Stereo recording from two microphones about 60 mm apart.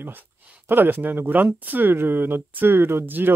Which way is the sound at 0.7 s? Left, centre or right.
Right.